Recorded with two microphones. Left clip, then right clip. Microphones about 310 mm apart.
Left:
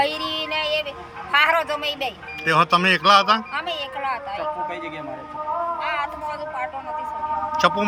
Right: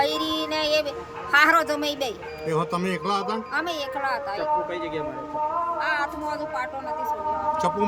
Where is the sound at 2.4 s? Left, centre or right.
Centre.